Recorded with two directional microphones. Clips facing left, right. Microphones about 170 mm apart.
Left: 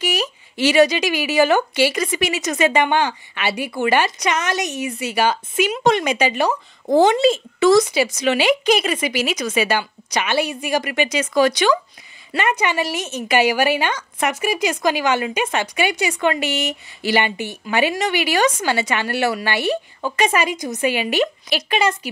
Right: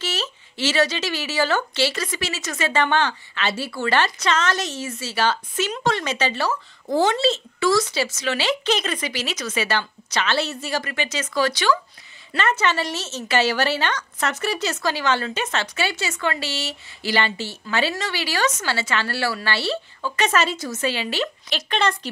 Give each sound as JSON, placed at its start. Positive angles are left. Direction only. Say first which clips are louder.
{"t": 0.0, "sound": "speech", "louder": "left 6 dB", "side_deg": 15}